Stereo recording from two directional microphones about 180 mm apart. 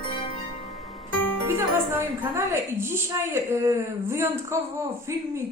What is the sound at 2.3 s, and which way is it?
Speech, 15° right (ahead or behind).